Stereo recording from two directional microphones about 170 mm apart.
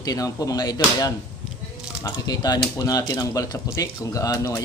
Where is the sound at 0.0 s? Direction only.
20° left (ahead or behind).